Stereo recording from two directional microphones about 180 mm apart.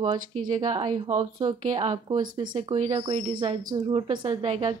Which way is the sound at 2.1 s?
25° right (ahead or behind).